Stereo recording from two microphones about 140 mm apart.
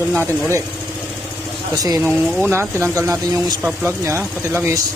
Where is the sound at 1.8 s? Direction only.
20° right (ahead or behind).